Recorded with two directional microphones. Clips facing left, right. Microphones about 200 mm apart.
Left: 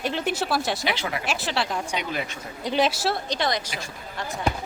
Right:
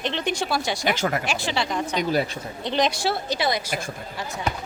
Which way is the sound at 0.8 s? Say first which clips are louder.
Right 4 dB; 45° right (ahead or behind).